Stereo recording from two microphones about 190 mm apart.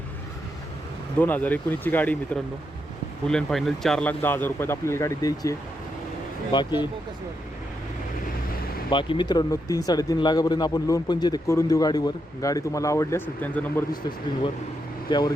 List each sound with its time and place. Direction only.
1.2 s speech: 10° left (ahead or behind)
8.9 s speech: 25° left (ahead or behind); by 13.8 s 10° left (ahead or behind)